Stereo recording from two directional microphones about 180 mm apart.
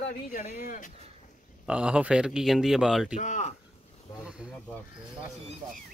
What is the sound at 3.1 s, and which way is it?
Speech, 45° left (ahead or behind).